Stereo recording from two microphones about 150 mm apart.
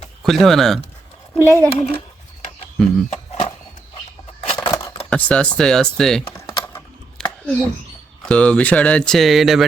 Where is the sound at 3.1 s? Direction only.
50° left (ahead or behind).